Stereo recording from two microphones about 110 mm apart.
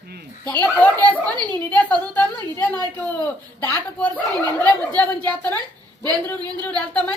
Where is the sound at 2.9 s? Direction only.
15° left (ahead or behind).